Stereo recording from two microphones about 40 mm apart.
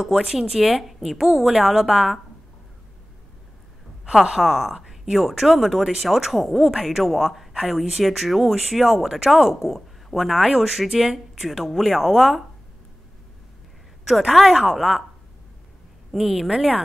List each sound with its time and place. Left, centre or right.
0.4 s a woman's voice: centre
4.0 s a woman's voice: centre
14.0 s speech: centre
16.1 s a woman's voice: centre